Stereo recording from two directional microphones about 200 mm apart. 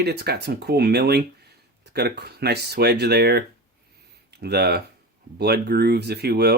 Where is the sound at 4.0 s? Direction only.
55° right (ahead or behind).